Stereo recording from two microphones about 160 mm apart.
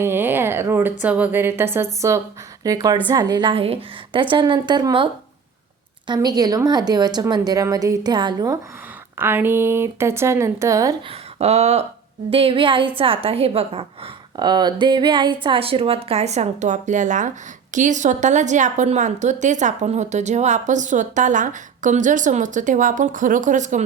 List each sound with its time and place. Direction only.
0.0 s a woman's voice: 15° right (ahead or behind)
6.1 s a woman's voice: 25° right (ahead or behind)
9.1 s speech: 15° right (ahead or behind)
11.1 s a woman's voice: 40° right (ahead or behind)